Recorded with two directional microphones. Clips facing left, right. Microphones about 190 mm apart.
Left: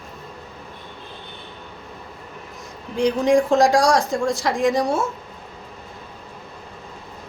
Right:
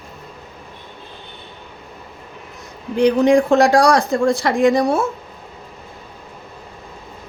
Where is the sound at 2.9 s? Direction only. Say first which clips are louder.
Right 4 dB; 65° right (ahead or behind).